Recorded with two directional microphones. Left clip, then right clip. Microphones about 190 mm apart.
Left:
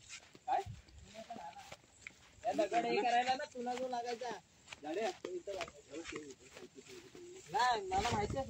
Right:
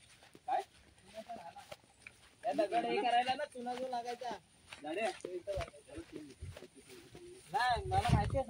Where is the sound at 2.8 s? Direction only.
10° right (ahead or behind).